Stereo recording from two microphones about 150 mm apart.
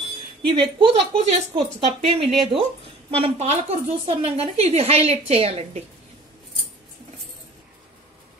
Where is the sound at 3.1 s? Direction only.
45° right (ahead or behind).